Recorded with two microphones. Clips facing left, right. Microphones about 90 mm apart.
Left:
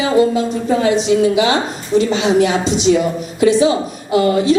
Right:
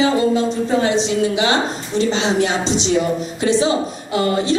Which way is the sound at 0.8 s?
30° right (ahead or behind).